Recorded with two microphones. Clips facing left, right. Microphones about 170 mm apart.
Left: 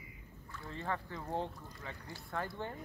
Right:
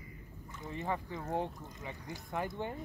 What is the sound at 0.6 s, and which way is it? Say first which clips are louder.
Speech: right 3 dB; 15° right (ahead or behind).